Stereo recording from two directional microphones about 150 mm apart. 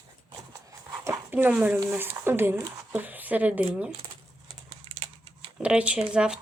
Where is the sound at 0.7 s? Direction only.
20° right (ahead or behind).